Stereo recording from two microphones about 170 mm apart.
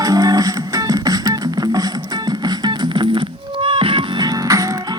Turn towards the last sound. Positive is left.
turn(degrees=-20)  # may be behind; listen again after turning